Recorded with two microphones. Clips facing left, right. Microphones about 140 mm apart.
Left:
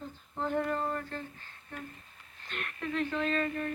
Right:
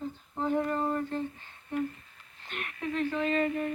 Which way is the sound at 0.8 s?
20° right (ahead or behind).